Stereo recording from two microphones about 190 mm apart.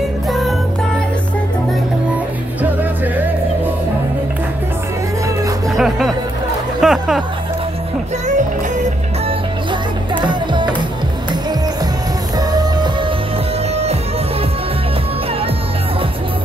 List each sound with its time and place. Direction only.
0.3 s music: centre (ahead or behind)
2.6 s music: 10° right (ahead or behind)
5.8 s music: centre (ahead or behind)
6.8 s a sound: centre (ahead or behind)
10.2 s music: 25° right (ahead or behind)
12.4 s music: 20° right (ahead or behind)